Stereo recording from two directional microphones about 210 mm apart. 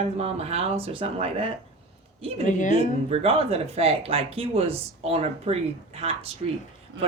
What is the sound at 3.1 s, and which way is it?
Speech, 25° right (ahead or behind).